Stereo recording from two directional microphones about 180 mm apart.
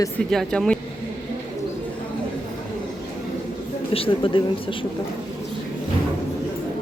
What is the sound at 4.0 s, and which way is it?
Speech, 30° left (ahead or behind).